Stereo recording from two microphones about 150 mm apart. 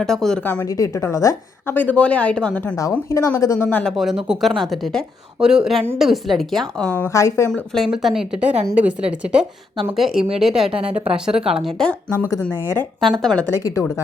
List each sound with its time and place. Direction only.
0.0 s a woman's voice: centre (ahead or behind)
0.4 s a woman's voice: 15° left (ahead or behind)
2.9 s a woman's voice: 20° left (ahead or behind)
3.9 s a woman's voice: centre (ahead or behind)
7.1 s a woman's voice: 20° left (ahead or behind)
7.9 s a woman's voice: 5° right (ahead or behind)